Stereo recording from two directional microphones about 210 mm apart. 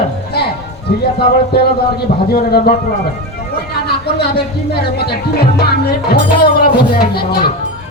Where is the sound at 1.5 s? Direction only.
50° left (ahead or behind).